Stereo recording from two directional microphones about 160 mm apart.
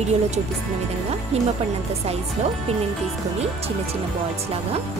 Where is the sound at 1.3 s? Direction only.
40° right (ahead or behind).